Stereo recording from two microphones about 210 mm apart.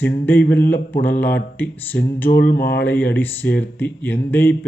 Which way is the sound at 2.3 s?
50° left (ahead or behind).